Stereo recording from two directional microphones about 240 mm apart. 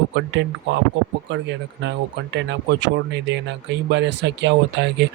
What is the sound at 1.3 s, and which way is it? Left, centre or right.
Speech, right.